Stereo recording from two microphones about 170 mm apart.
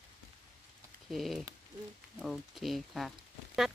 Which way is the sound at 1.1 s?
Centre (ahead or behind).